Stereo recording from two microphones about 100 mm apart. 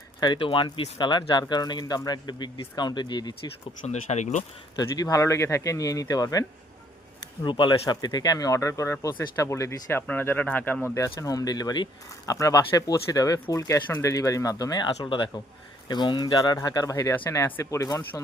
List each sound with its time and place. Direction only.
0.2 s speech: 60° left (ahead or behind)
4.1 s speech: 90° left
4.8 s speech: 40° left (ahead or behind)
7.4 s speech: 50° left (ahead or behind); by 10.8 s 15° left (ahead or behind)
10.9 s speech: 30° left (ahead or behind); by 16.3 s 50° left (ahead or behind)
16.3 s speech: 35° left (ahead or behind)